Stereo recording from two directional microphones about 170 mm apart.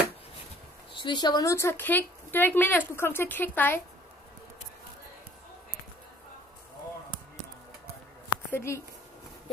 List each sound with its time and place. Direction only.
0.9 s speech: 25° left (ahead or behind)
8.5 s speech: 15° left (ahead or behind)